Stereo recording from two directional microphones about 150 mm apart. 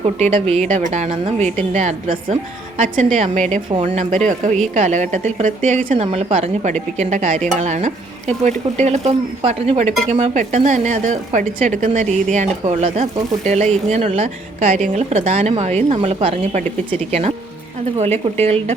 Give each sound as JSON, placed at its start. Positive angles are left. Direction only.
{"t": 0.0, "sound": "a woman's voice", "side_deg": -40}
{"t": 3.2, "sound": "a woman's voice", "side_deg": -50}
{"t": 6.1, "sound": "a woman's voice", "side_deg": -40}
{"t": 6.9, "sound": "a woman's voice", "side_deg": -50}